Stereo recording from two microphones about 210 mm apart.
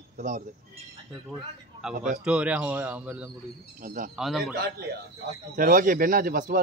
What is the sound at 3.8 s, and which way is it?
Speech, 40° right (ahead or behind).